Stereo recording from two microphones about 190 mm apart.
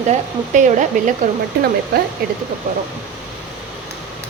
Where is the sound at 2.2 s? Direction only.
50° right (ahead or behind).